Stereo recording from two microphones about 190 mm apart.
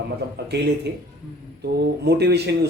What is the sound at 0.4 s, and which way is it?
Speech, 60° right (ahead or behind).